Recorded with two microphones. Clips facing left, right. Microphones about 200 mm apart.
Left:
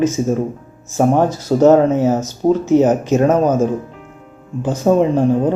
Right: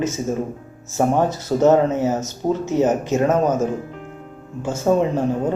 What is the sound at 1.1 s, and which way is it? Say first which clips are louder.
Speech: left 4 dB; 15° left (ahead or behind).